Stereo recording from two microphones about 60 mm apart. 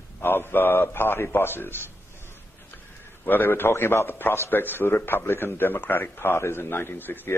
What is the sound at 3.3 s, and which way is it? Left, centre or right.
A man's voice, left.